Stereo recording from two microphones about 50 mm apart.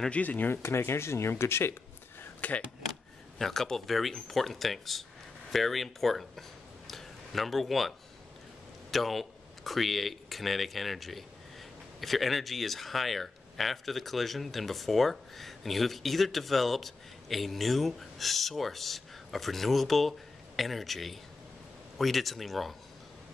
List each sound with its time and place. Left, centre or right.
0.1 s speech: left
0.5 s speech: left
2.4 s speech: left
2.9 s speech: centre
8.9 s speech: centre